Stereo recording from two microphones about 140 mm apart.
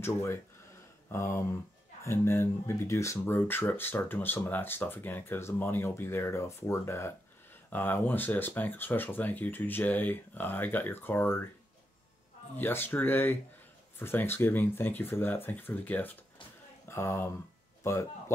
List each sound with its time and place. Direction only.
0.0 s speech: 15° left (ahead or behind)
12.5 s speech: 15° left (ahead or behind)